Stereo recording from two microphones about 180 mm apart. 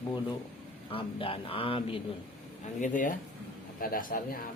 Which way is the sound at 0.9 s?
30° left (ahead or behind).